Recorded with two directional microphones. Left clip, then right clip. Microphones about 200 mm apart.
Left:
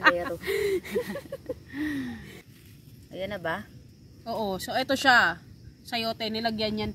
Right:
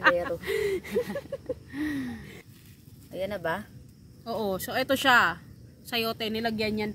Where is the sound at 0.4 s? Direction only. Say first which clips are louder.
Left 1 dB; 50° left (ahead or behind).